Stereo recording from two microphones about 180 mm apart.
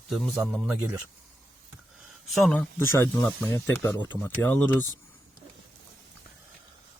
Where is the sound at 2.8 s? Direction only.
15° left (ahead or behind).